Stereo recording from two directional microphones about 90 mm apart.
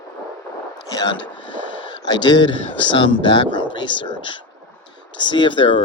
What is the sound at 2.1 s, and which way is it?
Speech, 55° left (ahead or behind).